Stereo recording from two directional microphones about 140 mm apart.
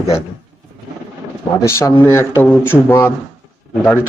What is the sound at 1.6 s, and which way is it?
Speech, 20° left (ahead or behind).